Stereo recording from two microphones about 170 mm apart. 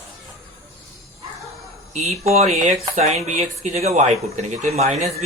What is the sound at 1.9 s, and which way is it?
Speech, 40° right (ahead or behind).